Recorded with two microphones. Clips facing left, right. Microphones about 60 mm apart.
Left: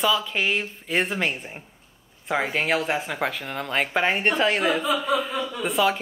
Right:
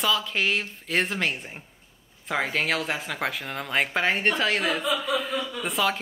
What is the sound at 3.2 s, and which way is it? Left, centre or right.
Speech, centre.